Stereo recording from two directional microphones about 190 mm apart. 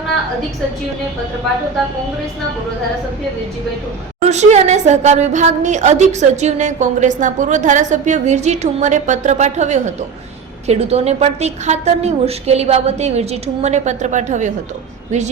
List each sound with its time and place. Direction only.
4.3 s speech: 35° right (ahead or behind)